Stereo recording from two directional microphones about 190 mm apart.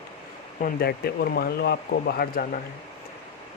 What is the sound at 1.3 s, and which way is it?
Speech, 55° left (ahead or behind).